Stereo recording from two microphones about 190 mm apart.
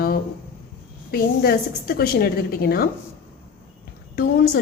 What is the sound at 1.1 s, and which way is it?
A woman's voice, 55° left (ahead or behind).